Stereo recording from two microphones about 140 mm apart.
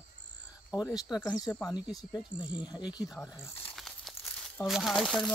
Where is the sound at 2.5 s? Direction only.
30° left (ahead or behind).